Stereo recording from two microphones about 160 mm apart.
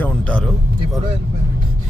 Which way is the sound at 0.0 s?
5° left (ahead or behind).